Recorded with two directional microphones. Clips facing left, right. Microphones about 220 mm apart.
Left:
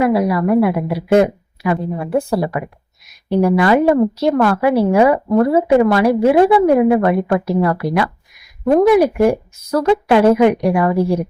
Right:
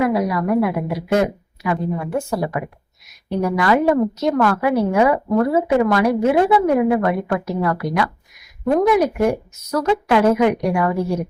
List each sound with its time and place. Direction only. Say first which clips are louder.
0.0 s a woman's voice: left 4 dB; 30° left (ahead or behind)